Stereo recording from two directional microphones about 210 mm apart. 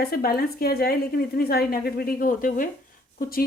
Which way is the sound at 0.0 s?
45° left (ahead or behind).